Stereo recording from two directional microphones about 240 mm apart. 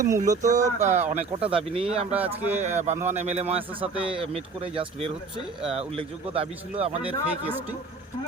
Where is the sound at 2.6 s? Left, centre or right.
Right.